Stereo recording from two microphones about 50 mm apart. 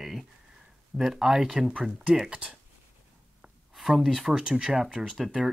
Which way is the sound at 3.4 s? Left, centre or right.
Centre.